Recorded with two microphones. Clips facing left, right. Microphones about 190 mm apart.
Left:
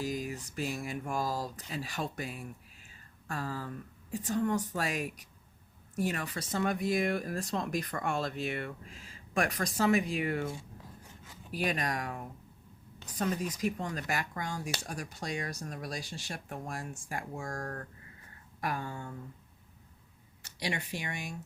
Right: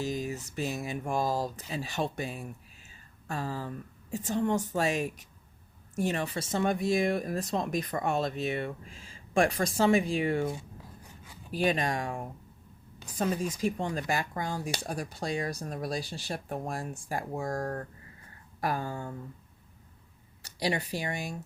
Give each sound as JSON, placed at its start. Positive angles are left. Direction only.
{"t": 0.0, "sound": "speech", "side_deg": -25}
{"t": 11.5, "sound": "speech", "side_deg": -25}
{"t": 20.4, "sound": "speech", "side_deg": -35}